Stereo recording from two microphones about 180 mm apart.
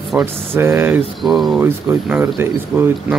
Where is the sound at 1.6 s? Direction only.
15° right (ahead or behind).